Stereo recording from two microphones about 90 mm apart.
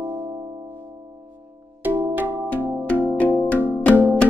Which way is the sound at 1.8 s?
20° right (ahead or behind).